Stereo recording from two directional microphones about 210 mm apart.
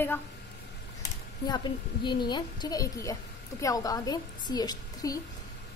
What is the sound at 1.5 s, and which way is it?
A woman's voice, 20° left (ahead or behind).